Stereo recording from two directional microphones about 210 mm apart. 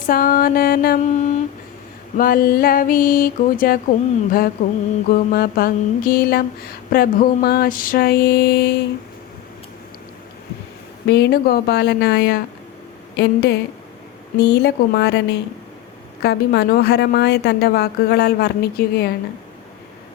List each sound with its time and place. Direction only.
0.0 s mantra: 45° left (ahead or behind)
11.0 s mantra: 50° left (ahead or behind)